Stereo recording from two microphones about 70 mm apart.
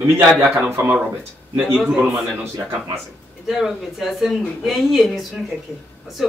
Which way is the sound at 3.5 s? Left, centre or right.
Centre.